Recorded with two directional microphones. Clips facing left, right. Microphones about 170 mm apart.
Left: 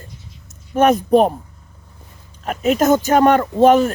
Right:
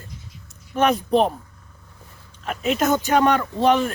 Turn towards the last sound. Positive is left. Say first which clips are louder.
# left 7 dB
turn(degrees=45)  # may be behind; listen again after turning